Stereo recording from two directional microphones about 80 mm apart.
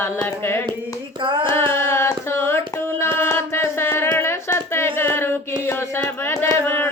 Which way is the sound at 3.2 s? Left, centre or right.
Left.